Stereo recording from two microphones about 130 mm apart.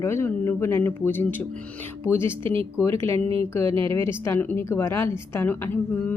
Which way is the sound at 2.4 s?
45° right (ahead or behind).